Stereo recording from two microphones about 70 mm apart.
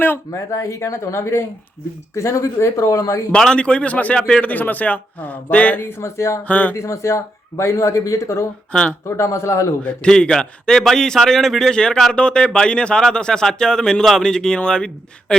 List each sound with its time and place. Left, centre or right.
0.3 s speech: left
3.3 s a man's voice: centre
6.0 s speech: left
6.4 s a man's voice: left
6.7 s speech: left
8.7 s speech: centre
9.0 s speech: left
9.8 s speech: centre